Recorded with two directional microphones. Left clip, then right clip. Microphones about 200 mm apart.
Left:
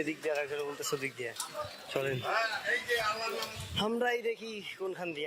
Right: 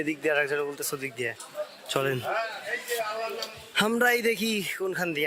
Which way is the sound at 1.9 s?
20° right (ahead or behind).